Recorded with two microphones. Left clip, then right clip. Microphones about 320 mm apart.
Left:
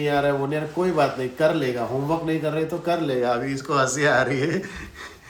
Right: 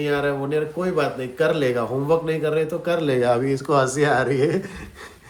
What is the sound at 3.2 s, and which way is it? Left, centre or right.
Speech, right.